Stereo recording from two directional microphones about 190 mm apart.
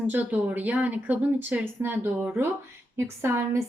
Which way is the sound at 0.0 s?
5° right (ahead or behind).